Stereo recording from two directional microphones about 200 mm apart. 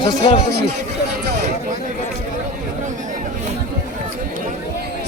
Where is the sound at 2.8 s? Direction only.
40° right (ahead or behind).